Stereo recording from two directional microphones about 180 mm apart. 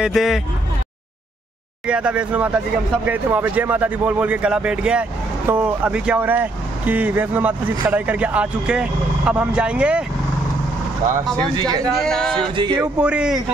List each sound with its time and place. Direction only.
0.0 s a man's voice: centre (ahead or behind)
1.9 s speech: 5° right (ahead or behind)
11.5 s music: 20° right (ahead or behind)
11.8 s a man's voice: centre (ahead or behind)
12.4 s music: 25° right (ahead or behind)
13.0 s a man's voice: 5° right (ahead or behind)